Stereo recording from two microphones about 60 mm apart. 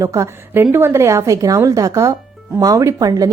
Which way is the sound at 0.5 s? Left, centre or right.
Right.